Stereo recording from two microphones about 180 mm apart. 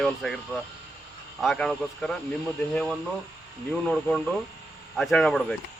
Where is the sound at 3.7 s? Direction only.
5° left (ahead or behind).